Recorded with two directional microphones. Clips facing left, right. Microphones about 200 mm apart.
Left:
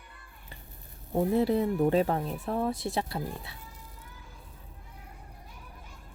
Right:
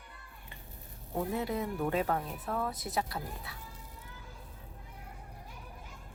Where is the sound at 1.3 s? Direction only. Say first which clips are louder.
Left 10 dB; 30° left (ahead or behind).